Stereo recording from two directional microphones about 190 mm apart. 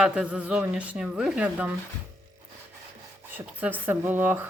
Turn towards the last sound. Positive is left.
turn(degrees=-10)  # may be behind; listen again after turning